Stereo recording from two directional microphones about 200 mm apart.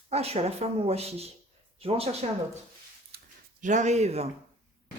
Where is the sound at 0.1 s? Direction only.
30° right (ahead or behind).